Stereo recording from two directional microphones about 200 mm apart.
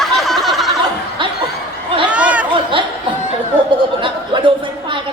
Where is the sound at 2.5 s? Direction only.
25° right (ahead or behind).